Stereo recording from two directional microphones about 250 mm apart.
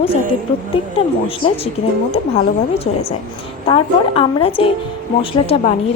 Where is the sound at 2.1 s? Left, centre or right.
Left.